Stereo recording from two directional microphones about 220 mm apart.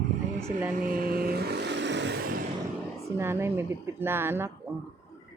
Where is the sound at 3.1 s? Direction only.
10° right (ahead or behind).